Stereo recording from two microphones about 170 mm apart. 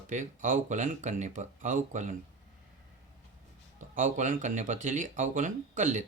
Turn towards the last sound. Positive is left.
turn(degrees=-45)  # may be behind; listen again after turning